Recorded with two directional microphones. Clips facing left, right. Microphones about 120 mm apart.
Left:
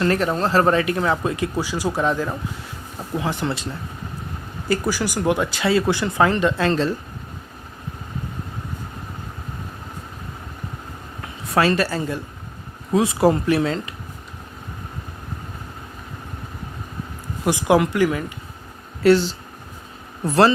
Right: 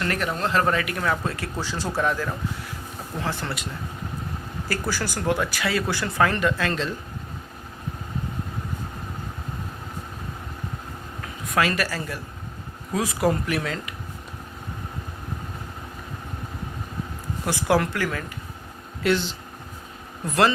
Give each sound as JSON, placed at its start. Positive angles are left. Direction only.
{"t": 0.0, "sound": "speech", "side_deg": 30}
{"t": 4.7, "sound": "speech", "side_deg": 15}
{"t": 11.4, "sound": "speech", "side_deg": 30}
{"t": 17.4, "sound": "speech", "side_deg": 15}
{"t": 19.0, "sound": "speech", "side_deg": 40}